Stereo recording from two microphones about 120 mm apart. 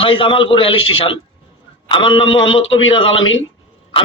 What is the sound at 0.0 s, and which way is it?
A man's voice, 45° left (ahead or behind).